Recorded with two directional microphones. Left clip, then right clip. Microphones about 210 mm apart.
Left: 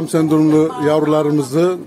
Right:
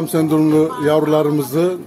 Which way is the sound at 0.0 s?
15° left (ahead or behind).